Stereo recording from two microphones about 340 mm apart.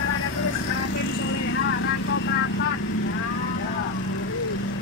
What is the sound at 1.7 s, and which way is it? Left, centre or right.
Vehicle, left.